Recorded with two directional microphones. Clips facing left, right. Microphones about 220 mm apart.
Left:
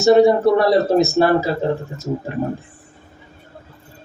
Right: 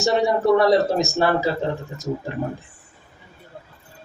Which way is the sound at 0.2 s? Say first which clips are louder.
Left 5 dB; 35° left (ahead or behind).